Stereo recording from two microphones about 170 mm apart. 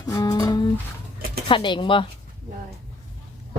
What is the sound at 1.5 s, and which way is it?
Speech, 30° left (ahead or behind).